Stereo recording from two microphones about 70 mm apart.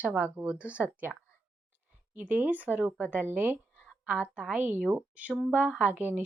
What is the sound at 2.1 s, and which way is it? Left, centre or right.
A woman's voice, right.